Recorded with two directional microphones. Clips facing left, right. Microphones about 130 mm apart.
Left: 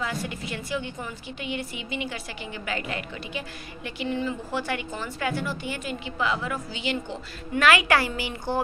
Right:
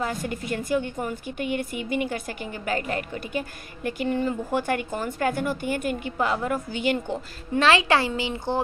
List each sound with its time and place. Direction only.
0.0 s a woman's voice: 45° right (ahead or behind)
7.5 s a woman's voice: 30° right (ahead or behind)